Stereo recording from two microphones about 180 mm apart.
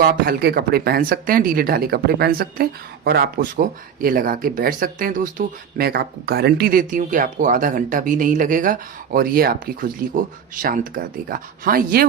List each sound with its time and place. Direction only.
0.0 s speech: 60° right (ahead or behind)